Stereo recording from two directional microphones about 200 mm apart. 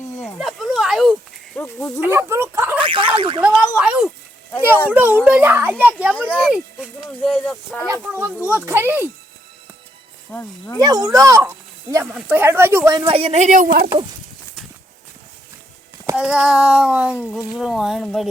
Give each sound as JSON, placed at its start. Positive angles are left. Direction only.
{"t": 0.2, "sound": "a sound", "side_deg": 0}
{"t": 1.5, "sound": "speech", "side_deg": 10}
{"t": 2.0, "sound": "speech", "side_deg": -10}
{"t": 2.8, "sound": "speech", "side_deg": -25}
{"t": 3.6, "sound": "speech", "side_deg": -5}
{"t": 6.1, "sound": "speech", "side_deg": 5}
{"t": 6.4, "sound": "speech", "side_deg": -5}
{"t": 8.1, "sound": "speech", "side_deg": -10}
{"t": 10.8, "sound": "speech", "side_deg": -20}
{"t": 16.1, "sound": "speech", "side_deg": -5}